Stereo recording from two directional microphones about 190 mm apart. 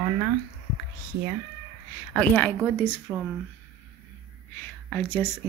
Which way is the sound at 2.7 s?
10° left (ahead or behind).